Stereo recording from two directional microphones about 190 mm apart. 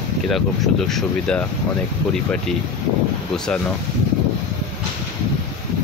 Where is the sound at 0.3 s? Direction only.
Centre (ahead or behind).